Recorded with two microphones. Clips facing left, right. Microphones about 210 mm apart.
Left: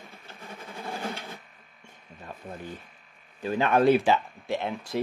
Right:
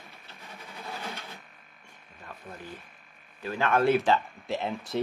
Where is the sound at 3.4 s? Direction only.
20° left (ahead or behind).